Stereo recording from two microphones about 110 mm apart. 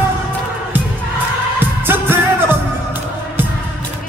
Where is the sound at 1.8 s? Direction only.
20° right (ahead or behind).